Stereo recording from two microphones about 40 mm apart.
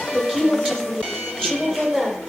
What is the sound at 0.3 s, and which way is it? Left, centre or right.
Music, centre.